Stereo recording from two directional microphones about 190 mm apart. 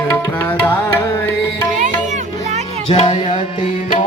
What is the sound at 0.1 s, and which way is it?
Music, 15° left (ahead or behind).